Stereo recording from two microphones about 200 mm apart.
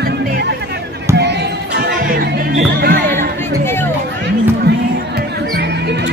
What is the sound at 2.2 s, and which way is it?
Music, 45° right (ahead or behind).